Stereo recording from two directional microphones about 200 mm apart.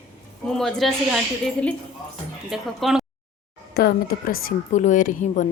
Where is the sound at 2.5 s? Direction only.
Centre (ahead or behind).